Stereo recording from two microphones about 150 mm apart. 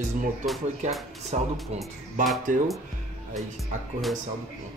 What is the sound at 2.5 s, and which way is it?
Speech, 65° right (ahead or behind).